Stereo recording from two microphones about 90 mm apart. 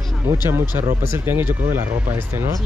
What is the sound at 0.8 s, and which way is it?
Speech, 30° right (ahead or behind).